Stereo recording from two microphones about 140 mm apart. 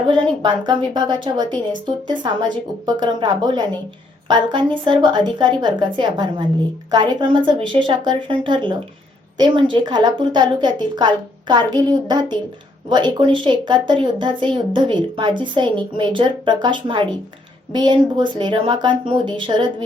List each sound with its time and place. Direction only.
0.4 s a woman's voice: 35° right (ahead or behind)